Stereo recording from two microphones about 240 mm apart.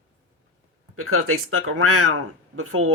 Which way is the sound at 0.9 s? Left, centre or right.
Right.